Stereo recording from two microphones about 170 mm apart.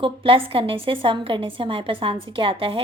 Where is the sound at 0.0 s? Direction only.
30° right (ahead or behind).